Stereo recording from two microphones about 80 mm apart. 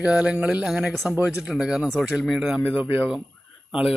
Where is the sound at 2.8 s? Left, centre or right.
Right.